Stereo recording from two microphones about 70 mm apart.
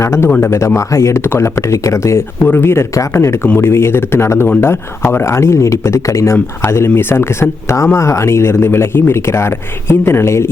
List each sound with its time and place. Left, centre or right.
0.0 s speech: left
0.3 s speech: left
0.5 s speech: left
3.4 s speech: left